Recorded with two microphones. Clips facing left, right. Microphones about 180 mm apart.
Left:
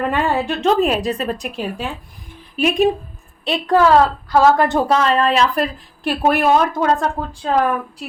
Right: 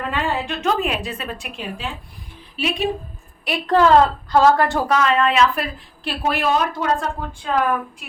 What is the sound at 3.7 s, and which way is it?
A woman's voice, 10° left (ahead or behind).